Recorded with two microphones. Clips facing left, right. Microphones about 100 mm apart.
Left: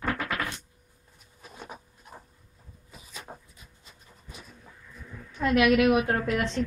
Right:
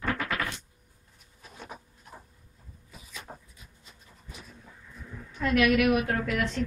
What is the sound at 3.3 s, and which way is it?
Dog, 5° left (ahead or behind).